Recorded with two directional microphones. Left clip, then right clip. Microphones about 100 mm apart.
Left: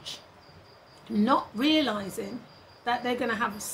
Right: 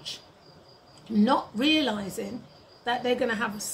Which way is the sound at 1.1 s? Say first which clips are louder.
Right 1 dB; 15° right (ahead or behind).